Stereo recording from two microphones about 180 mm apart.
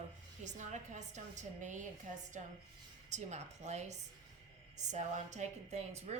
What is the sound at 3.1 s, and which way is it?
A woman's voice, 40° right (ahead or behind).